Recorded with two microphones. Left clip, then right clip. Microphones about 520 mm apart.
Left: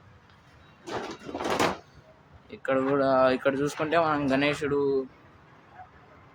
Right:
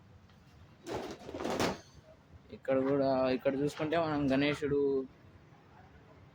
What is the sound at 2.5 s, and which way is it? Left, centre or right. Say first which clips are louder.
Speech: left 5 dB; right.